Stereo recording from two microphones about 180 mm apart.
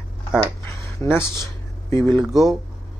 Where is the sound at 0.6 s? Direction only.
15° left (ahead or behind).